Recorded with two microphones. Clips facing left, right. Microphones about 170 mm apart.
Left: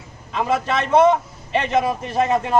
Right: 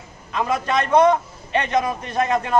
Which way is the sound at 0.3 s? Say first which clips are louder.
Left 1 dB; 5° left (ahead or behind).